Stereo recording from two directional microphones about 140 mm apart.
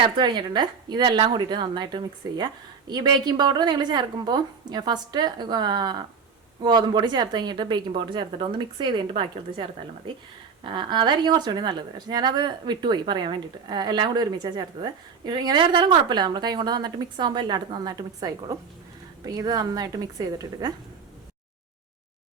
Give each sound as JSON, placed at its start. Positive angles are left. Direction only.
{"t": 0.0, "sound": "a woman's voice", "side_deg": -35}